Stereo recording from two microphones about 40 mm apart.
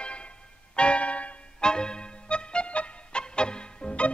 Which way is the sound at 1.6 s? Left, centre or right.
Left.